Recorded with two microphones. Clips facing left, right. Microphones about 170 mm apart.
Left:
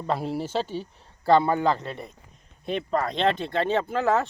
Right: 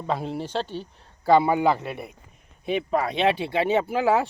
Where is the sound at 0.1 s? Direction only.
5° left (ahead or behind).